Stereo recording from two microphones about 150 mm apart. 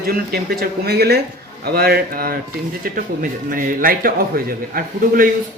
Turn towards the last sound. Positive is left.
turn(degrees=-70)  # may be behind; listen again after turning